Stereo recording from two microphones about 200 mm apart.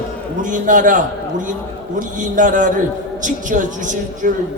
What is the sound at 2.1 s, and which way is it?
A woman's voice, 40° right (ahead or behind).